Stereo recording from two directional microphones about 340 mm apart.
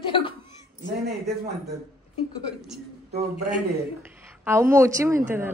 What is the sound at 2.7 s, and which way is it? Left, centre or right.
A man's voice, centre.